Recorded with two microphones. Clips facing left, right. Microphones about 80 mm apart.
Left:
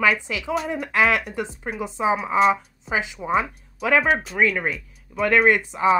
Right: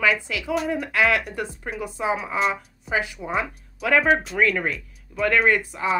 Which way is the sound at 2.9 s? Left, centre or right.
Left.